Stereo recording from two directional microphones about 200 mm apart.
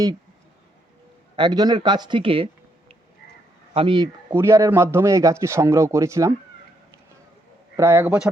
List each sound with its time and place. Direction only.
1.4 s speech: 20° right (ahead or behind)
3.8 s speech: 25° right (ahead or behind)
4.3 s a man's voice: 15° right (ahead or behind)
7.8 s a man's voice: 15° right (ahead or behind)